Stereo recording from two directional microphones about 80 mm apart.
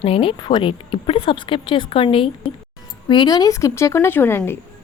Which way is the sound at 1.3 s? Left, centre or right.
Left.